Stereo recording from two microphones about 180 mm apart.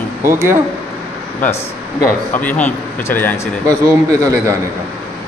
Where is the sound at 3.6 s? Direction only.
15° right (ahead or behind).